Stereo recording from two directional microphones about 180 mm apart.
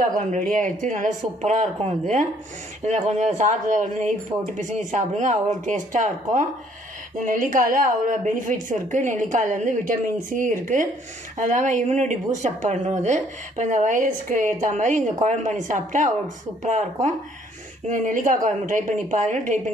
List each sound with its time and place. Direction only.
0.3 s speech: 45° right (ahead or behind)